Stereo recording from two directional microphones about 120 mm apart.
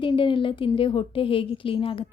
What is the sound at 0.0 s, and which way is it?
A woman's voice, 45° left (ahead or behind).